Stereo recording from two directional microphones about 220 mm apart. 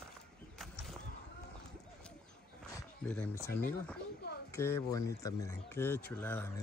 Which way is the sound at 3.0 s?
5° left (ahead or behind).